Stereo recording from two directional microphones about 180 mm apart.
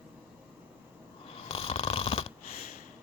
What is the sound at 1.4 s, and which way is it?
Snoring, 30° left (ahead or behind).